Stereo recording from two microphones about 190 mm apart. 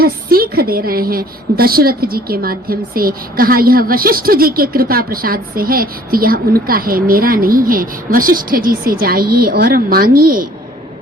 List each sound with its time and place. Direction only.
0.0 s a woman's voice: 50° right (ahead or behind)